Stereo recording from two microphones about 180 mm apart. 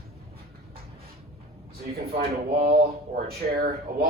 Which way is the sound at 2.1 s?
60° right (ahead or behind).